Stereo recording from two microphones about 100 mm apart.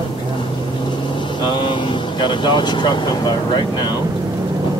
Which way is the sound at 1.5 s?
55° left (ahead or behind).